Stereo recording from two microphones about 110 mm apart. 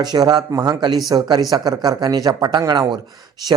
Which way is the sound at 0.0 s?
40° right (ahead or behind).